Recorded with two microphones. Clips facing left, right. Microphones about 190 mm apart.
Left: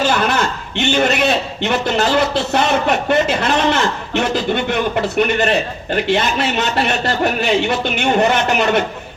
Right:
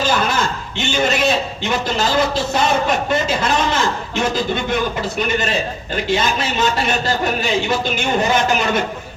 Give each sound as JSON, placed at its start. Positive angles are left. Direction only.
{"t": 0.0, "sound": "a man's voice", "side_deg": 65}